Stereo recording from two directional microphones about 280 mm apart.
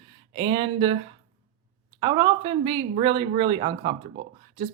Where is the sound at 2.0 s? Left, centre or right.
Centre.